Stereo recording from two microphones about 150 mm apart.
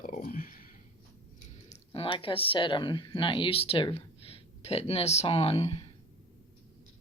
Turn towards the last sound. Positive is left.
turn(degrees=45)  # may be behind; listen again after turning